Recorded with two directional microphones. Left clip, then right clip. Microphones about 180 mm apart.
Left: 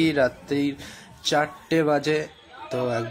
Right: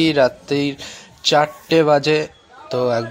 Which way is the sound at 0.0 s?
15° right (ahead or behind).